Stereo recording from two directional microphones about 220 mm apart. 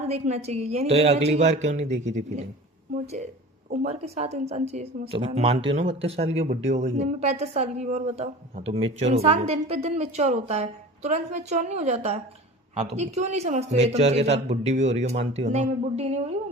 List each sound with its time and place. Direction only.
0.0 s a woman's voice: 30° right (ahead or behind)
3.7 s a woman's voice: 30° right (ahead or behind)